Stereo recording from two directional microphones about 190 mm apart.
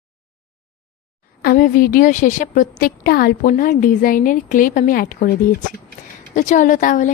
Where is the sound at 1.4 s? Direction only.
45° left (ahead or behind).